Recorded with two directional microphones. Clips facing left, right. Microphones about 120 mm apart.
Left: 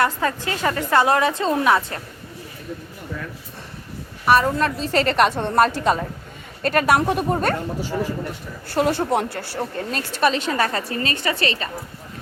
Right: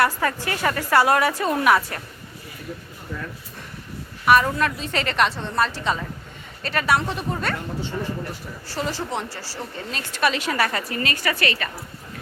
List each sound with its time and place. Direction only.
0.0 s a woman's voice: 20° left (ahead or behind)
4.5 s a woman's voice: 35° left (ahead or behind)
7.8 s a man's voice: 10° left (ahead or behind)
8.6 s a woman's voice: 60° left (ahead or behind)
10.2 s a woman's voice: 30° left (ahead or behind)